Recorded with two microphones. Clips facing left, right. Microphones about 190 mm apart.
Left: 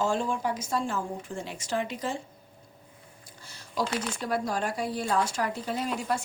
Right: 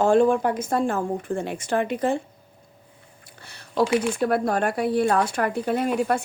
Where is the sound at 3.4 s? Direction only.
65° right (ahead or behind).